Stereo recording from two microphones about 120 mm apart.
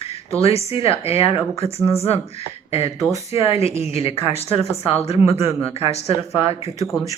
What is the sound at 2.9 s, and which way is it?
Speech, 25° right (ahead or behind).